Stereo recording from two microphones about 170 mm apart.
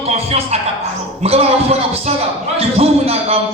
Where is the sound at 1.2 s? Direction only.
35° right (ahead or behind).